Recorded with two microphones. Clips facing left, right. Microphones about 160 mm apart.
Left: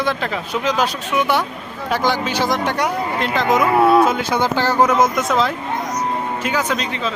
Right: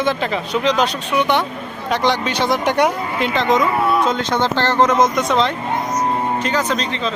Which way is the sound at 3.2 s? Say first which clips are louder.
Right 1 dB; centre (ahead or behind).